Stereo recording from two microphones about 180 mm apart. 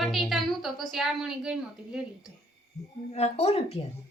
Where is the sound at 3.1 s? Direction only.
35° left (ahead or behind).